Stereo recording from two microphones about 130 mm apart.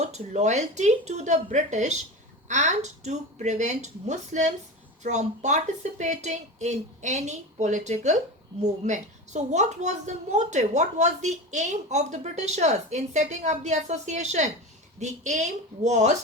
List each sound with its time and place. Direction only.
0.0 s a woman's voice: 60° right (ahead or behind)